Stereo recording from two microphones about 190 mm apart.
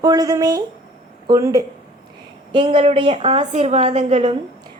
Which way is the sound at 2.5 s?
25° right (ahead or behind).